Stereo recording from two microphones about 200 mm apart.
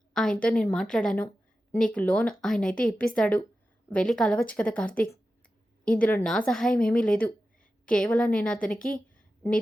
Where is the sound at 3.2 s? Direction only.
5° left (ahead or behind).